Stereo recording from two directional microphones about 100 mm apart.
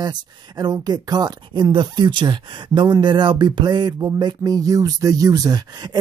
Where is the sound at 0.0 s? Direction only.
45° right (ahead or behind).